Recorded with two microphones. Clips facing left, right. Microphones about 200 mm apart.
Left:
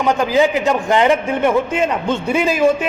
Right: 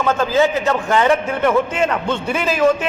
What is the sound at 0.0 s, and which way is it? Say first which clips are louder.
A man's voice: left 1 dB; 15° left (ahead or behind).